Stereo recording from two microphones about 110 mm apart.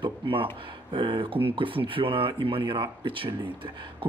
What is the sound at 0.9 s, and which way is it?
Speech, 50° right (ahead or behind).